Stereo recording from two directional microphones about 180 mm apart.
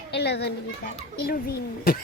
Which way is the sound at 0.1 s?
70° left (ahead or behind).